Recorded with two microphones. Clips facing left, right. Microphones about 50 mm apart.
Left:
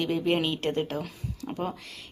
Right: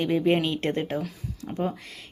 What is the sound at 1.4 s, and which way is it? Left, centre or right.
Speech, centre.